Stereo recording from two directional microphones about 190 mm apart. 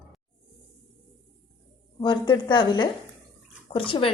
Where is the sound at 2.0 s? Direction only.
25° left (ahead or behind).